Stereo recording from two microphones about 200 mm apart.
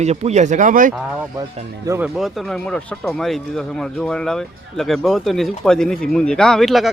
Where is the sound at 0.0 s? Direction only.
35° right (ahead or behind).